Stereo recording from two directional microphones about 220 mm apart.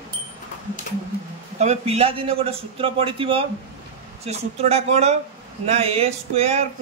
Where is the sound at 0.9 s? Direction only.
35° left (ahead or behind).